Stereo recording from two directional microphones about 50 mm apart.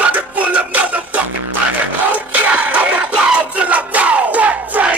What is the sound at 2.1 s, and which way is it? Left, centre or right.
Music, right.